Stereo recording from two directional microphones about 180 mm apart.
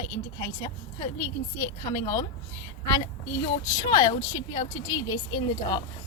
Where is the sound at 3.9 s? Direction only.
25° left (ahead or behind).